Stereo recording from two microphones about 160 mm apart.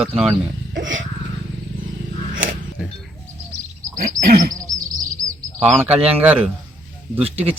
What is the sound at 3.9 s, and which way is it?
Wild animals, 60° right (ahead or behind).